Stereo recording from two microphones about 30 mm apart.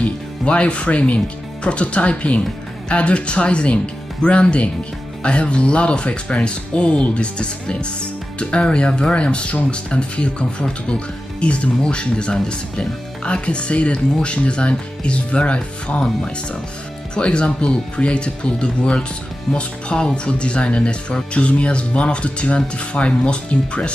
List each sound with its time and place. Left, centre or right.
0.0 s speech: left
17.1 s speech: left